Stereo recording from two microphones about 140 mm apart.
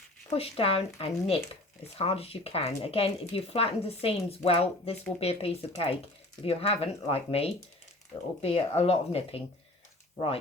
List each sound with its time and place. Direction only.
0.3 s speech: 45° left (ahead or behind)